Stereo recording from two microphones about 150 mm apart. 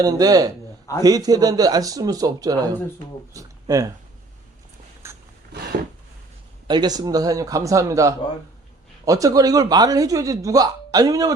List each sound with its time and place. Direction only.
0.0 s speech: 25° right (ahead or behind)
5.0 s a sound: 15° right (ahead or behind)
6.7 s speech: 30° right (ahead or behind)